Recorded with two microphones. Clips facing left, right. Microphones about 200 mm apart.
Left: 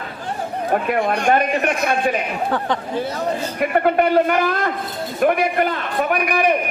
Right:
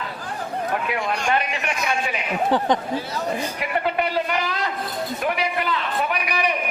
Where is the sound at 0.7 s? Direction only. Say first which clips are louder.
Left 8 dB; 50° left (ahead or behind).